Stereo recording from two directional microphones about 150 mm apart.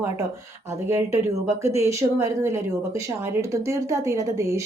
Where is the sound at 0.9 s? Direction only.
20° right (ahead or behind).